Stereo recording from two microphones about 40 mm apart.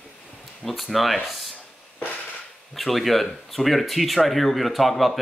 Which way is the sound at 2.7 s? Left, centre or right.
Centre.